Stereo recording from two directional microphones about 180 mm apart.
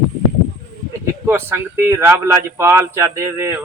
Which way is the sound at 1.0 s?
15° right (ahead or behind).